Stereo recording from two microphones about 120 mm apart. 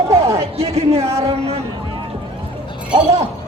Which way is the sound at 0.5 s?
55° right (ahead or behind).